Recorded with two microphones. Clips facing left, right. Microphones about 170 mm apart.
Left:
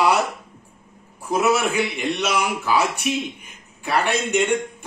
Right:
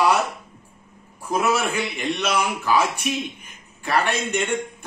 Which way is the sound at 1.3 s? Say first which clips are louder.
Left 2 dB; 10° left (ahead or behind).